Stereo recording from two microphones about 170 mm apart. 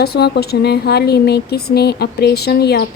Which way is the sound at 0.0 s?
70° left (ahead or behind).